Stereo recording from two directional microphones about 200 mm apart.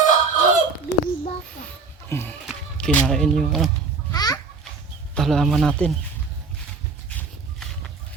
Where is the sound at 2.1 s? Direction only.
10° left (ahead or behind).